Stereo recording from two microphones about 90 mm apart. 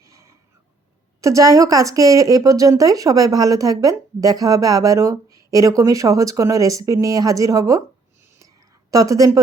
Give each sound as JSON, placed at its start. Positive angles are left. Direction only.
{"t": 0.0, "sound": "a sound", "side_deg": -35}
{"t": 1.2, "sound": "a woman's voice", "side_deg": -40}
{"t": 8.9, "sound": "a woman's voice", "side_deg": -40}